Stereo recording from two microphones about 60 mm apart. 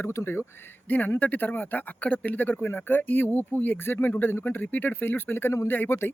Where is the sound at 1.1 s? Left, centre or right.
Left.